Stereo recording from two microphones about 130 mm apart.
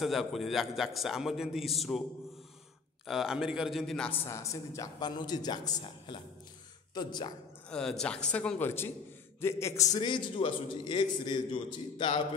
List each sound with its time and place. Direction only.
0.0 s a man's voice: centre (ahead or behind)
3.1 s a man's voice: centre (ahead or behind)
4.3 s a man's voice: 25° left (ahead or behind)
7.7 s a man's voice: 5° left (ahead or behind); by 9.8 s 20° left (ahead or behind)
9.9 s a man's voice: 35° left (ahead or behind)